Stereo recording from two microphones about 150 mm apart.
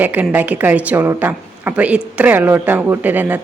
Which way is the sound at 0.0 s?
10° right (ahead or behind).